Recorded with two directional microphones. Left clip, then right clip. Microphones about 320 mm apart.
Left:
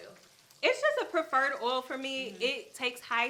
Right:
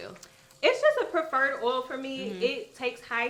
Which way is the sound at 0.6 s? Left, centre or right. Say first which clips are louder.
Right 5 dB; centre.